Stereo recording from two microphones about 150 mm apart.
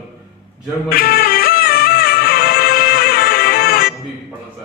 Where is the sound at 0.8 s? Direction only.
85° left.